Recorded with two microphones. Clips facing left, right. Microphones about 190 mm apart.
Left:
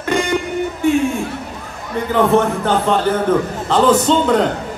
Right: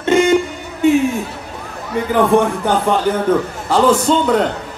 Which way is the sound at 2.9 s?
15° right (ahead or behind).